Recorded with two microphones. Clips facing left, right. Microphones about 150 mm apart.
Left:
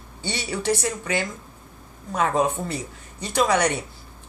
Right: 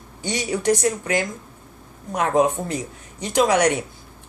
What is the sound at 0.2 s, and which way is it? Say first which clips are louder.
Speech: right 4 dB; 15° right (ahead or behind).